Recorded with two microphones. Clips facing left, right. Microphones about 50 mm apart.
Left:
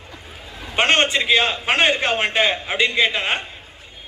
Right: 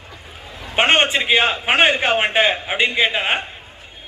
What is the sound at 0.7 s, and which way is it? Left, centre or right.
A man's voice, centre.